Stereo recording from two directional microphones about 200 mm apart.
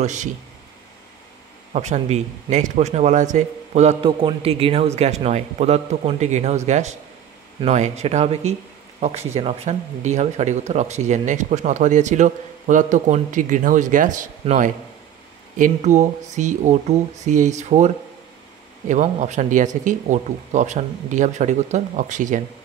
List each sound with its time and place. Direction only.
0.0 s speech: 35° right (ahead or behind)
1.7 s speech: 35° right (ahead or behind)